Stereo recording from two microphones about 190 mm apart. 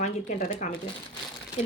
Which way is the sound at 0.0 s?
40° left (ahead or behind).